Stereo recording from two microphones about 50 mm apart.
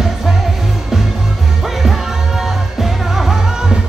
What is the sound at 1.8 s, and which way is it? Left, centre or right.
Music, centre.